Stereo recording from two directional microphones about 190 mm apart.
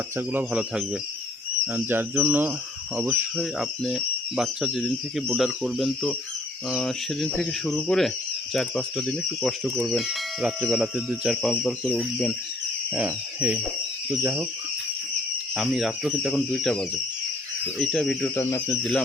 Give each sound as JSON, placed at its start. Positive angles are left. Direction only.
{"t": 0.2, "sound": "speech", "side_deg": -10}
{"t": 12.9, "sound": "speech", "side_deg": -5}
{"t": 15.5, "sound": "speech", "side_deg": 0}
{"t": 18.3, "sound": "speech", "side_deg": 15}